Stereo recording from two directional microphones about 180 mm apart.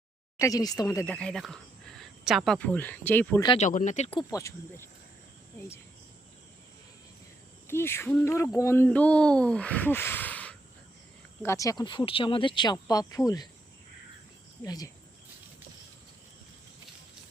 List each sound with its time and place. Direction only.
0.3 s speech: 20° left (ahead or behind)
1.1 s speech: 5° left (ahead or behind)
3.6 s speech: 45° left (ahead or behind); by 5.8 s 15° left (ahead or behind)
7.7 s speech: 15° left (ahead or behind)
14.6 s speech: 20° left (ahead or behind)